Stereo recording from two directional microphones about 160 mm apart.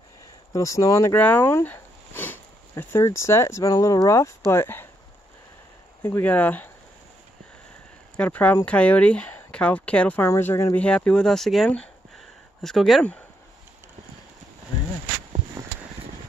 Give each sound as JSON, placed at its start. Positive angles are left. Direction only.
{"t": 0.5, "sound": "speech", "side_deg": 20}
{"t": 6.0, "sound": "speech", "side_deg": 15}
{"t": 8.2, "sound": "speech", "side_deg": 10}